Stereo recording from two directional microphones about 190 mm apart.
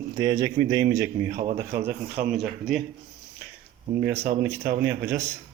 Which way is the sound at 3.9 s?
10° right (ahead or behind).